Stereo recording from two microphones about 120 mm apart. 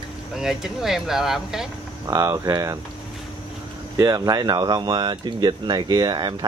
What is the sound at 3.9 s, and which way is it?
Speech, 30° right (ahead or behind).